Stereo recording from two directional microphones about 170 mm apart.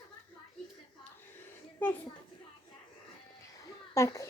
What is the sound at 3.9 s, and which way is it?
Children playing, 20° left (ahead or behind).